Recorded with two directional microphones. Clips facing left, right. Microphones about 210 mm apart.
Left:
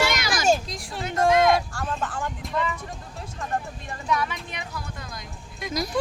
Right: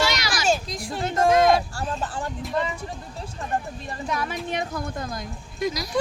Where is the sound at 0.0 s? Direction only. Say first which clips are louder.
Left 1 dB; 50° left (ahead or behind).